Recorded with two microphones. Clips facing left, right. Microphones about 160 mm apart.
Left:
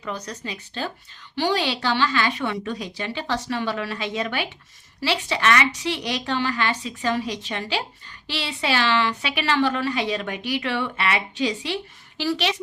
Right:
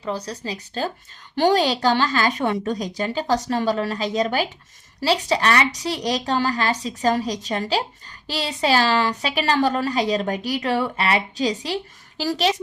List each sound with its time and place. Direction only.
0.0 s a woman's voice: 35° right (ahead or behind)